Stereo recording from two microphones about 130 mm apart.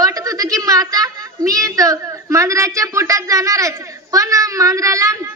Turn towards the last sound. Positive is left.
turn(degrees=-25)  # may be behind; listen again after turning